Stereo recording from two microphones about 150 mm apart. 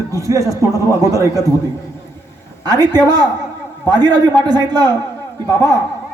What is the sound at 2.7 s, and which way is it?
A man's voice, 25° right (ahead or behind).